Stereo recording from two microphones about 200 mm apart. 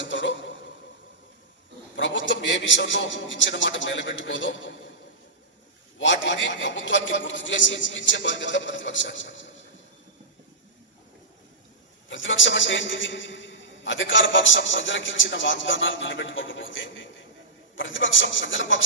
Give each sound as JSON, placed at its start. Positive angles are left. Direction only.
{"t": 0.0, "sound": "a sound", "side_deg": 65}
{"t": 2.0, "sound": "a man's voice", "side_deg": 65}
{"t": 6.0, "sound": "a man's voice", "side_deg": 65}
{"t": 12.0, "sound": "a man's voice", "side_deg": 70}